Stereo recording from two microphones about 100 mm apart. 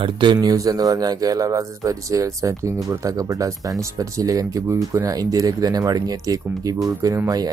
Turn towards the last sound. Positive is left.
turn(degrees=-40)  # may be behind; listen again after turning